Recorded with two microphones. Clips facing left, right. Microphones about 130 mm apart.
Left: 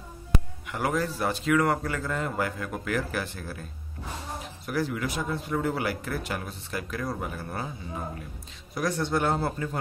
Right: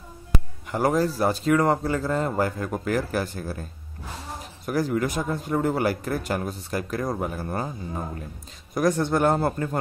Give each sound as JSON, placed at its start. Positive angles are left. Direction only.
{"t": 0.7, "sound": "speech", "side_deg": -35}
{"t": 4.6, "sound": "speech", "side_deg": -45}
{"t": 8.7, "sound": "speech", "side_deg": -45}